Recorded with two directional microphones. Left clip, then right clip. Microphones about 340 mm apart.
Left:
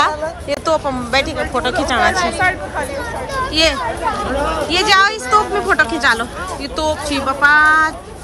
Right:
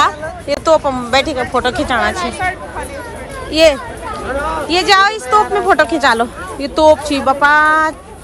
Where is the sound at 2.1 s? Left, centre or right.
Left.